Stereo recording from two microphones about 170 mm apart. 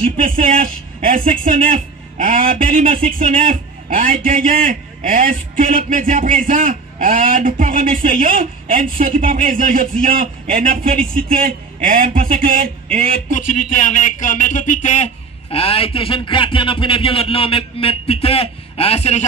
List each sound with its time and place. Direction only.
0.2 s a man's voice: 55° right (ahead or behind)
13.3 s a man's voice: 50° left (ahead or behind)